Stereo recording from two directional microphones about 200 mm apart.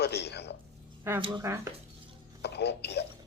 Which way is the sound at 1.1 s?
10° right (ahead or behind).